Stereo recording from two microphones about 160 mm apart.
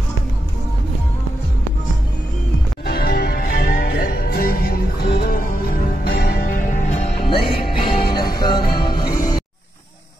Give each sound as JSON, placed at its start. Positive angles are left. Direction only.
{"t": 2.8, "sound": "music", "side_deg": 75}